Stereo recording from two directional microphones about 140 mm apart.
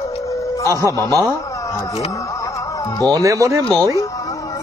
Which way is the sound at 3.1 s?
25° right (ahead or behind).